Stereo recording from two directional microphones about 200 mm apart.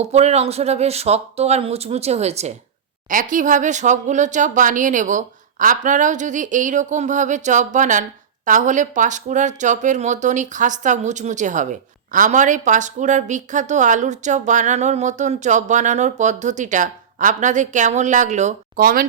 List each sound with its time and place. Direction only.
0.0 s speech: 35° right (ahead or behind)